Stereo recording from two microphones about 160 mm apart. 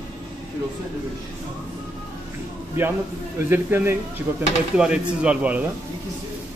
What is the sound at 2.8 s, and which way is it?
A man's voice, 15° right (ahead or behind).